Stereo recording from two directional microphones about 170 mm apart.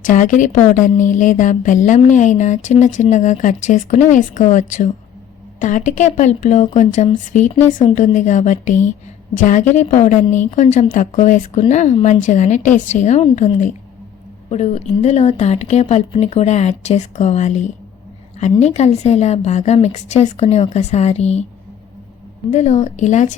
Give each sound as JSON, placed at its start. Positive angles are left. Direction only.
{"t": 0.0, "sound": "speech", "side_deg": 50}
{"t": 22.4, "sound": "speech", "side_deg": 45}